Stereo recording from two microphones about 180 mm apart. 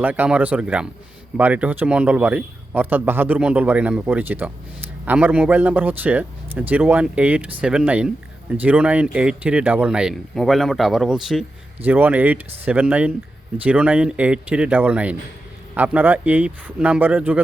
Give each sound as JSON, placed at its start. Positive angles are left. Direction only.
{"t": 0.0, "sound": "a man's voice", "side_deg": -10}